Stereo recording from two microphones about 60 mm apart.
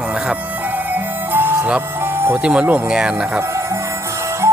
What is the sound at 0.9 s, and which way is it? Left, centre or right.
Music, right.